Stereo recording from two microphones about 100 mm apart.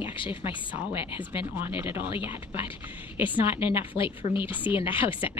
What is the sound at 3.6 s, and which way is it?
A woman's voice, 60° left (ahead or behind).